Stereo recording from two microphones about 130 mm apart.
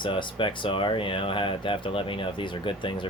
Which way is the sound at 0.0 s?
40° left (ahead or behind).